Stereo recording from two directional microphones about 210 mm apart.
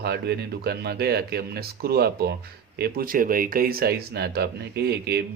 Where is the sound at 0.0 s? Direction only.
50° right (ahead or behind).